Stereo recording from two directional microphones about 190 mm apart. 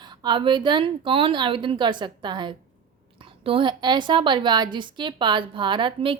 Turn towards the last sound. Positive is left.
turn(degrees=-25)  # may be behind; listen again after turning